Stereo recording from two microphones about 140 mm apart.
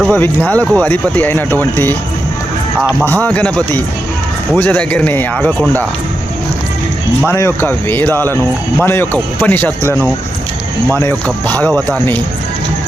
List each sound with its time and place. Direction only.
0.1 s speech: 10° left (ahead or behind)
3.0 s speech: 10° left (ahead or behind)
7.2 s speech: 15° left (ahead or behind)